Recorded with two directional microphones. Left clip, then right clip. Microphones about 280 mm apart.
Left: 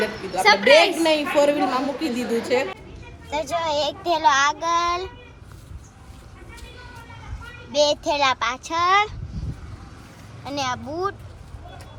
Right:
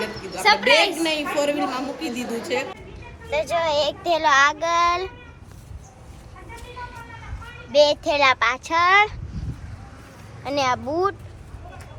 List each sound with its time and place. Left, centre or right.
0.4 s a woman's voice: centre
0.9 s a woman's voice: centre
3.2 s a child's voice: centre
7.7 s a child's voice: centre
10.4 s a child's voice: centre